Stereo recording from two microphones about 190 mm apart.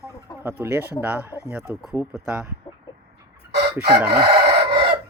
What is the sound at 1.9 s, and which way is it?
Speech, 5° right (ahead or behind).